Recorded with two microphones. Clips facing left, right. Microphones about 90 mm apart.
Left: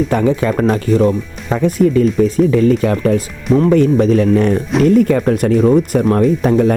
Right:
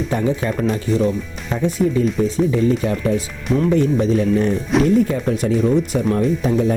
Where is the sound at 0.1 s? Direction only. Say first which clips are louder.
Left 6 dB; 75° left (ahead or behind).